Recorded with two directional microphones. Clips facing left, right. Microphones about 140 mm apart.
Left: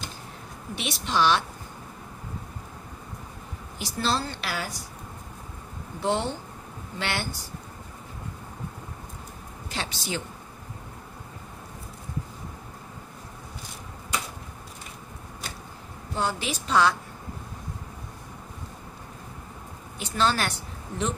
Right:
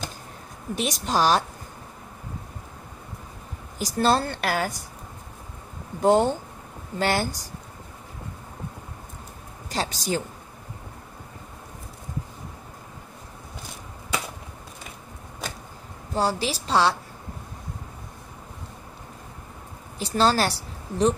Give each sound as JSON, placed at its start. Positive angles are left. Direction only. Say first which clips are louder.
{"t": 0.7, "sound": "a woman's voice", "louder": "right 2 dB", "side_deg": -40}
{"t": 3.7, "sound": "a woman's voice", "louder": "right 6 dB", "side_deg": -45}
{"t": 5.9, "sound": "a woman's voice", "louder": "right 8 dB", "side_deg": -45}
{"t": 9.7, "sound": "a woman's voice", "louder": "right 6 dB", "side_deg": -40}
{"t": 16.2, "sound": "a woman's voice", "louder": "right 4 dB", "side_deg": -35}
{"t": 20.0, "sound": "a woman's voice", "louder": "right 4 dB", "side_deg": -35}